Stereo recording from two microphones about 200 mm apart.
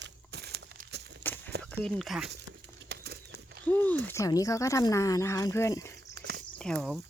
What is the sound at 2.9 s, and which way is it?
Bird, 55° right (ahead or behind).